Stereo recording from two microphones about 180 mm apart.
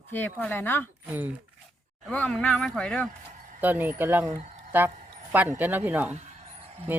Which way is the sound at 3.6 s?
10° right (ahead or behind).